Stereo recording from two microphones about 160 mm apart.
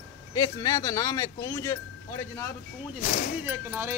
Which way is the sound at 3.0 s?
45° left (ahead or behind).